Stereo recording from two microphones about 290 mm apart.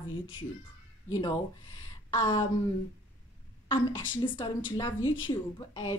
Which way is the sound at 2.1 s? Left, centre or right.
Centre.